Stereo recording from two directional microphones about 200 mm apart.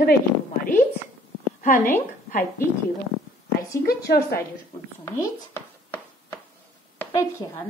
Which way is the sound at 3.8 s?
50° left (ahead or behind).